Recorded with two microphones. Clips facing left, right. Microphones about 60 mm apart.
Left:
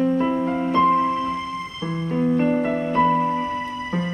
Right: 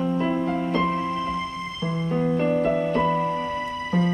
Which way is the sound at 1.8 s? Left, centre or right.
Left.